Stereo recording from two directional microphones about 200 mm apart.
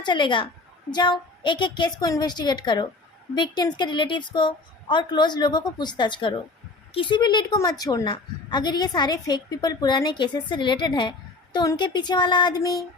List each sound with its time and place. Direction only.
0.0 s a woman's voice: 25° left (ahead or behind)